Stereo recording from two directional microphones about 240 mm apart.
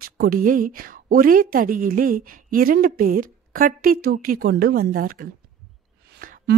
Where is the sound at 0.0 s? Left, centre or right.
Right.